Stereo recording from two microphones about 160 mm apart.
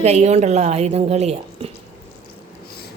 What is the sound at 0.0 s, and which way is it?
A woman's voice, 45° right (ahead or behind).